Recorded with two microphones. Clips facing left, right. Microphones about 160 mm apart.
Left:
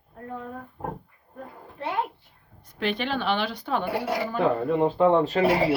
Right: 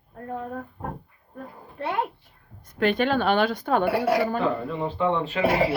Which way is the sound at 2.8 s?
50° right (ahead or behind).